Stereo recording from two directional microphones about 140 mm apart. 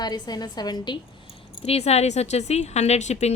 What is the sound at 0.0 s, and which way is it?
Speech, 30° left (ahead or behind).